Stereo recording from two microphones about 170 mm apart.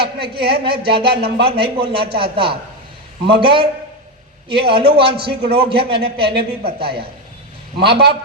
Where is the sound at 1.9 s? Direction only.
30° right (ahead or behind).